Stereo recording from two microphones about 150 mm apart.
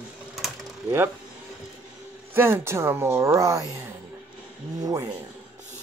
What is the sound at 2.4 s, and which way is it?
Speech, 15° right (ahead or behind).